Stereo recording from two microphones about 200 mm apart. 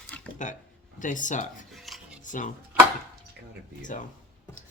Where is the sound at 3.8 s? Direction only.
40° left (ahead or behind).